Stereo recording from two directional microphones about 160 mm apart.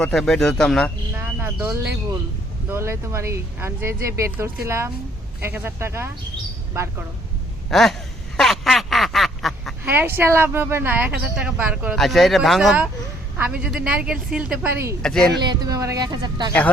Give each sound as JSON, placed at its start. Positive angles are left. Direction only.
{"t": 0.0, "sound": "speech", "side_deg": 5}
{"t": 1.1, "sound": "speech", "side_deg": -15}
{"t": 7.7, "sound": "speech", "side_deg": 0}
{"t": 8.4, "sound": "snicker", "side_deg": 0}
{"t": 9.8, "sound": "speech", "side_deg": -10}
{"t": 15.0, "sound": "speech", "side_deg": 5}
{"t": 15.4, "sound": "speech", "side_deg": -25}